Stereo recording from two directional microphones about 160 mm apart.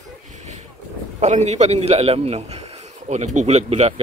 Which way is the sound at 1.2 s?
45° right (ahead or behind).